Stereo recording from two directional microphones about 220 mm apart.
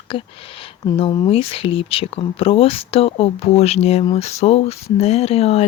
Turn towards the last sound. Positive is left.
turn(degrees=25)  # may be behind; listen again after turning